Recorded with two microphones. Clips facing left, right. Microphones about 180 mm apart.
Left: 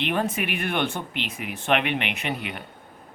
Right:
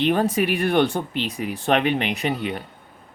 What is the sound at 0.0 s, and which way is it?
Speech, 35° right (ahead or behind).